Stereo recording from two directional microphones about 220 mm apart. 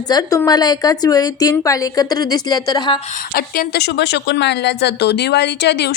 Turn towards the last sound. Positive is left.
turn(degrees=50)  # may be behind; listen again after turning